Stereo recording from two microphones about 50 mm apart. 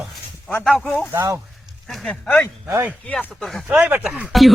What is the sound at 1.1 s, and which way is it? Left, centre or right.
Speech, right.